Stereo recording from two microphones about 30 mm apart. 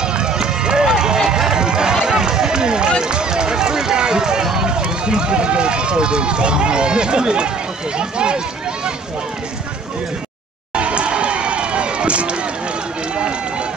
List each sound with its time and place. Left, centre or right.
0.0 s run: right; by 1.5 s centre
1.5 s run: right
8.0 s speech: right
10.7 s run: right